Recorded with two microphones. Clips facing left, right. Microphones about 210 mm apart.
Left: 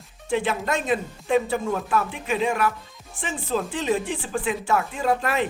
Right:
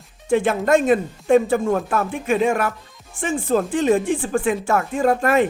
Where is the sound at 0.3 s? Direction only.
50° right (ahead or behind).